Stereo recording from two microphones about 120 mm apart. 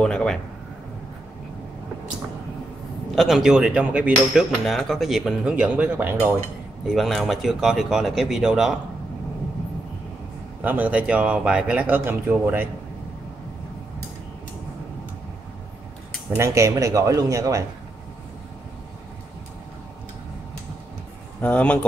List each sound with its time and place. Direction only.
0.0 s speech: 5° left (ahead or behind)
3.2 s a man's voice: centre (ahead or behind)
6.9 s speech: centre (ahead or behind)
10.6 s a man's voice: 15° right (ahead or behind)
16.3 s speech: 25° right (ahead or behind)
21.4 s speech: 10° left (ahead or behind)